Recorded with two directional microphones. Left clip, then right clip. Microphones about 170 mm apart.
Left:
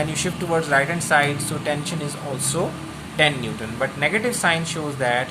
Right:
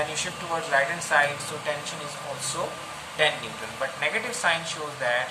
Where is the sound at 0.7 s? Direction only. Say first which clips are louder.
Left 3 dB; 65° left (ahead or behind).